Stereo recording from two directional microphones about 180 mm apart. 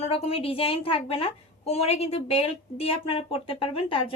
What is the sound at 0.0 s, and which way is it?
A woman's voice, 35° left (ahead or behind).